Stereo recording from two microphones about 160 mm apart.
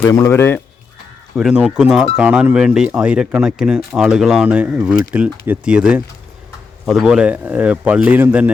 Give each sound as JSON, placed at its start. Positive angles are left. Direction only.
{"t": 0.0, "sound": "speech", "side_deg": 15}
{"t": 1.4, "sound": "speech", "side_deg": -5}